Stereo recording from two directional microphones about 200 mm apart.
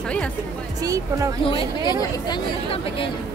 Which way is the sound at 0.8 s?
15° right (ahead or behind).